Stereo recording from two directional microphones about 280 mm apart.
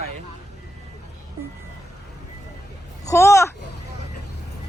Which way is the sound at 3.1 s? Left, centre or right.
Centre.